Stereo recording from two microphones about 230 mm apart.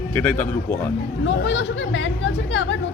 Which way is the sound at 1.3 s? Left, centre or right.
Left.